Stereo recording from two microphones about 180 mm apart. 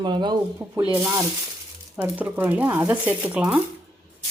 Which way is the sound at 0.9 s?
10° right (ahead or behind).